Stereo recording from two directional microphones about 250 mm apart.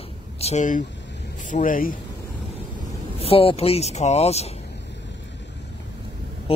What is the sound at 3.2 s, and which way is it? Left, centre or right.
Speech, left.